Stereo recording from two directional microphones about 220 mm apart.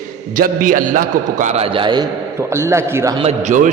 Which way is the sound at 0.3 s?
40° right (ahead or behind).